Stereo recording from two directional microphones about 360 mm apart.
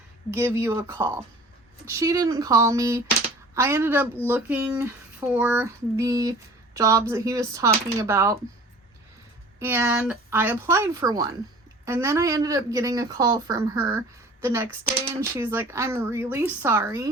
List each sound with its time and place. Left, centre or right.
0.3 s a woman's voice: centre
9.6 s a woman's voice: centre